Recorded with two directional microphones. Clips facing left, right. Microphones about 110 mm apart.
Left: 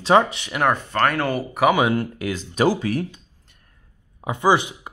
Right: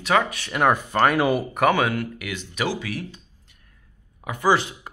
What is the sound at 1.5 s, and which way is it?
Speech, 5° left (ahead or behind).